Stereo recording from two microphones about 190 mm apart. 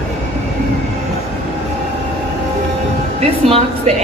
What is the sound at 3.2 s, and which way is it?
Speech, 35° right (ahead or behind).